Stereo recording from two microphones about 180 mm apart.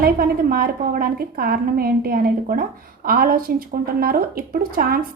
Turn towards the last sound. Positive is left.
turn(degrees=-55)  # may be behind; listen again after turning